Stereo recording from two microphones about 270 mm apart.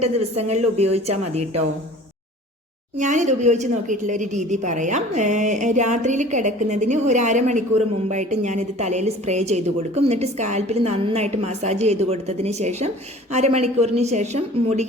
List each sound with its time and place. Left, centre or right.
0.0 s a woman's voice: right
3.0 s a woman's voice: right